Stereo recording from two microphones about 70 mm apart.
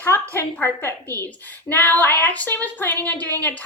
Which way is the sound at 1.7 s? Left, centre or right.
Left.